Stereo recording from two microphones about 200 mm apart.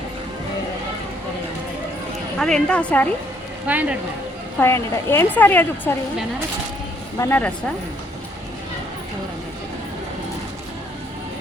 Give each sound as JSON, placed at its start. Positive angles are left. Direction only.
{"t": 2.4, "sound": "a woman's voice", "side_deg": 5}
{"t": 3.7, "sound": "speech", "side_deg": -5}
{"t": 4.6, "sound": "a woman's voice", "side_deg": 10}
{"t": 7.2, "sound": "a woman's voice", "side_deg": 10}